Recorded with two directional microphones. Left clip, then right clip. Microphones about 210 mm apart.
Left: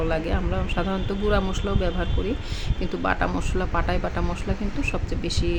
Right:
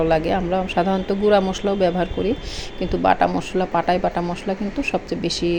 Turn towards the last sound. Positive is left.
turn(degrees=-15)  # may be behind; listen again after turning